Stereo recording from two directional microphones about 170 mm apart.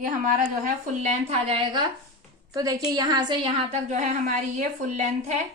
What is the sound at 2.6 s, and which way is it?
Speech, 20° right (ahead or behind).